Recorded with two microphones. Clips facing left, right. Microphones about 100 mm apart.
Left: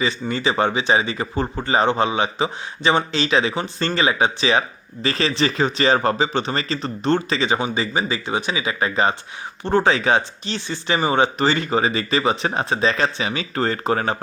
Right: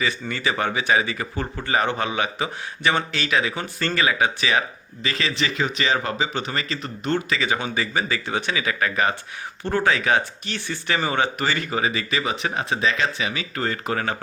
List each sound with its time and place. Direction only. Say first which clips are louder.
0.0 s speech: left 3 dB; 25° left (ahead or behind)